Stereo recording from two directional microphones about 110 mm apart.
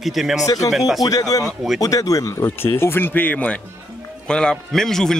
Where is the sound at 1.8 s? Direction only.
30° left (ahead or behind).